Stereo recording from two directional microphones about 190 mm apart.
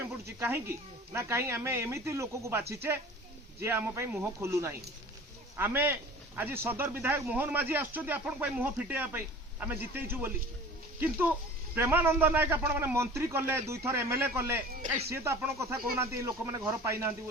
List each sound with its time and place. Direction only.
0.3 s a man's voice: 15° right (ahead or behind)
14.7 s speech: 45° right (ahead or behind)
15.1 s a man's voice: 15° right (ahead or behind)